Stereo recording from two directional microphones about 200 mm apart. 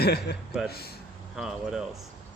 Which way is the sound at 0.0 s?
55° left (ahead or behind).